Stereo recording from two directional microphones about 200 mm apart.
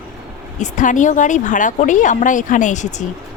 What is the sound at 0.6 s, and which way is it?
Speech, 40° left (ahead or behind).